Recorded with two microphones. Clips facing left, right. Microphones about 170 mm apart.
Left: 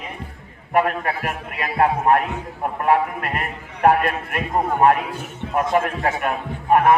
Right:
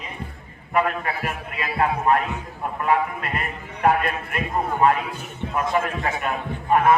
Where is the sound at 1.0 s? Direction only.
55° left (ahead or behind).